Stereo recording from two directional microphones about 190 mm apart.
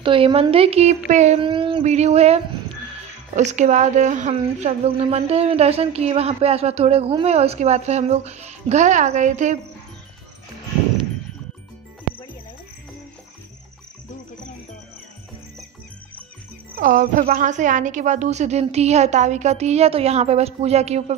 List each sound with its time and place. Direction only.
0.0 s a woman's voice: 30° right (ahead or behind)
16.7 s a woman's voice: 45° right (ahead or behind)